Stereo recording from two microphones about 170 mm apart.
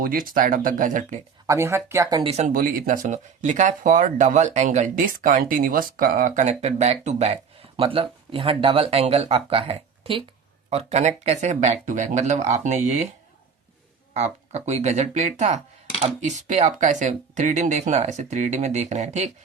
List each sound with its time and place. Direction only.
0.0 s speech: 55° right (ahead or behind)
1.5 s speech: 15° right (ahead or behind)
2.3 s speech: 45° right (ahead or behind)
14.1 s speech: 40° right (ahead or behind)